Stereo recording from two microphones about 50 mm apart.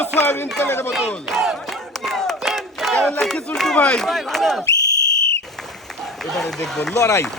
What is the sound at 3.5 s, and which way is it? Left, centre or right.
Speech, centre.